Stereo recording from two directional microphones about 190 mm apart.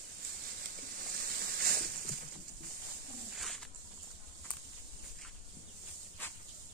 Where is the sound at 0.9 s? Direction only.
55° right (ahead or behind).